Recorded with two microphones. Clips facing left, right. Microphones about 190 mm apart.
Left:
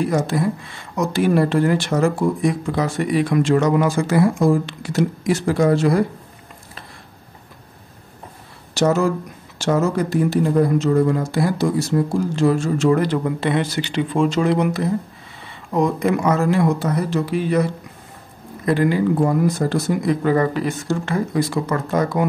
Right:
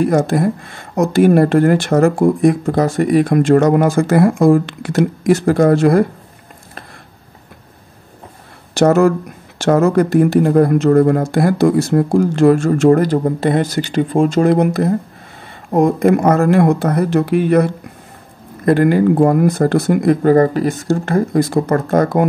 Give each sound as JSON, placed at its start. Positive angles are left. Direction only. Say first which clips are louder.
{"t": 0.0, "sound": "speech", "louder": "right 5 dB", "side_deg": -50}
{"t": 8.7, "sound": "speech", "louder": "right 6 dB", "side_deg": -60}
{"t": 18.7, "sound": "speech", "louder": "right 6 dB", "side_deg": -55}